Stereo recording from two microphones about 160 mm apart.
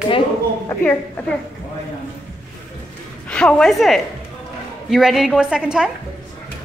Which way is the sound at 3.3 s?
5° left (ahead or behind).